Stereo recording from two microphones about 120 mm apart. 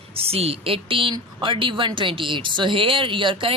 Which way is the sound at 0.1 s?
55° right (ahead or behind).